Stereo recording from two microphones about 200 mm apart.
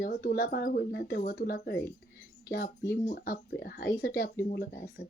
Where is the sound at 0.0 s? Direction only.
50° left (ahead or behind).